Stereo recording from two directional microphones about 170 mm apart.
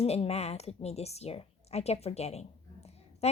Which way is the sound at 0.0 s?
35° left (ahead or behind).